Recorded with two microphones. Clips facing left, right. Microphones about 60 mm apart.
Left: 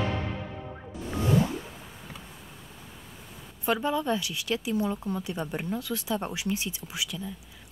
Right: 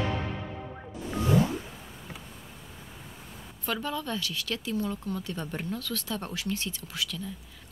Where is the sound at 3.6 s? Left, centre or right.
Centre.